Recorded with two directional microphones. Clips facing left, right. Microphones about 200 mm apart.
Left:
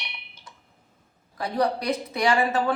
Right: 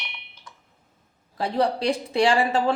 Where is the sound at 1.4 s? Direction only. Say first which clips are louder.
Right 2 dB; 30° right (ahead or behind).